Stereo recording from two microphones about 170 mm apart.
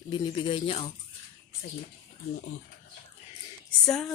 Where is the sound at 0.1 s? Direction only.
25° left (ahead or behind).